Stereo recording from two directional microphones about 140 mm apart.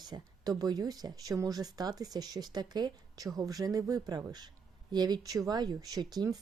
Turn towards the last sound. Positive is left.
turn(degrees=-30)  # may be behind; listen again after turning